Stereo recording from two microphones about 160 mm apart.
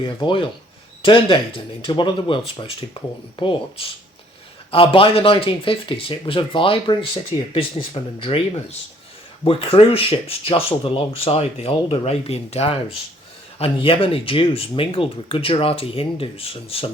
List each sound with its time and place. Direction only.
0.0 s speech: 30° left (ahead or behind)
9.4 s speech: 35° left (ahead or behind)